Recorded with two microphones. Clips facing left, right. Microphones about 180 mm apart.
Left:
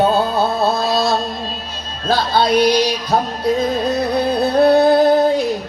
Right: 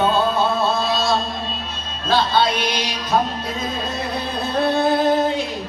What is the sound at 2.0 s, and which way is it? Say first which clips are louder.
Music: left 2 dB; 40° left (ahead or behind).